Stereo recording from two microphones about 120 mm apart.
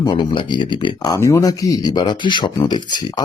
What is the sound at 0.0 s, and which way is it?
Speech, 40° left (ahead or behind).